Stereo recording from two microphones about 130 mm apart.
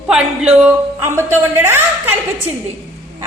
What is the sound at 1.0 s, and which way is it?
Speech, 20° right (ahead or behind).